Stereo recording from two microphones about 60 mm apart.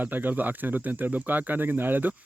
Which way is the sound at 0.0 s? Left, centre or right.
Right.